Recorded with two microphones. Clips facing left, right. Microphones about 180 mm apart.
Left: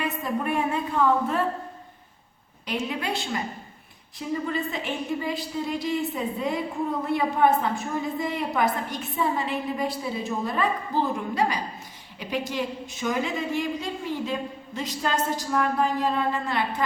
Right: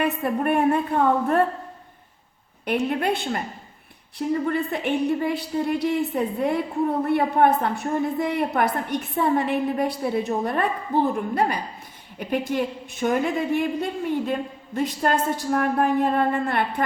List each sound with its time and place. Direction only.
0.0 s a woman's voice: 60° right (ahead or behind)
2.6 s a woman's voice: 60° right (ahead or behind)